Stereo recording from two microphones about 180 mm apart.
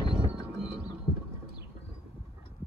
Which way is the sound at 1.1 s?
35° left (ahead or behind).